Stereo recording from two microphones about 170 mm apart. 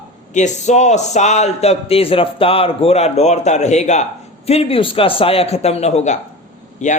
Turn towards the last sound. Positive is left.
turn(degrees=45)  # may be behind; listen again after turning